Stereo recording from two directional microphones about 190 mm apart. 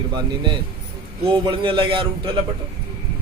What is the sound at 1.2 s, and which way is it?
A man's voice, 25° right (ahead or behind).